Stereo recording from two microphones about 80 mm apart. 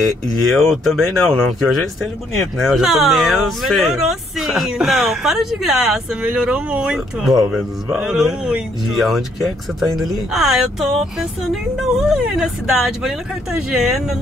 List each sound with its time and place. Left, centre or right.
0.0 s speech: centre
6.2 s speech: centre
7.2 s speech: centre
7.9 s speech: centre
8.9 s speech: centre